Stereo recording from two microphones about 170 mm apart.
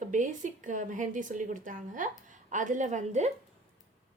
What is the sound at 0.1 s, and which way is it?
A woman's voice, 45° right (ahead or behind).